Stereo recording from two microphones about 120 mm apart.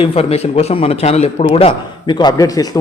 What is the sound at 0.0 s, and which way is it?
A man's voice, 55° left (ahead or behind).